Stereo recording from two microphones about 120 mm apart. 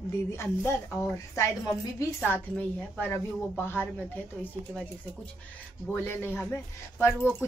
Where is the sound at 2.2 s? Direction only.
15° left (ahead or behind).